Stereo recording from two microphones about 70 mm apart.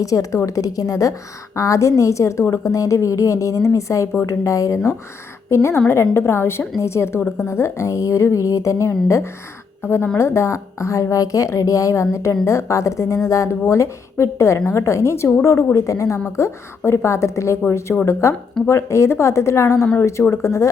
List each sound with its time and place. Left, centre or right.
0.0 s a woman's voice: left
9.8 s a woman's voice: left
10.2 s a woman's voice: left